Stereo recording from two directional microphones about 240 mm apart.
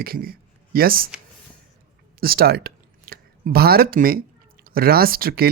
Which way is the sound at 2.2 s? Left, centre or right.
Right.